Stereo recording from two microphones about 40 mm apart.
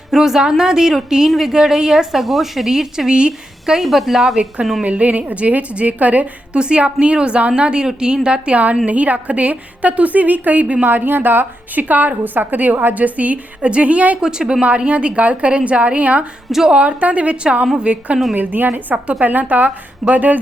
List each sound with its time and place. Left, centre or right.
0.1 s a woman's voice: centre
1.3 s a woman's voice: centre
3.1 s a woman's voice: right
3.8 s a woman's voice: centre
4.8 s a woman's voice: right
6.6 s a woman's voice: right
8.9 s a woman's voice: right
10.8 s a woman's voice: right
14.2 s a woman's voice: centre
14.8 s a woman's voice: right
18.3 s a woman's voice: right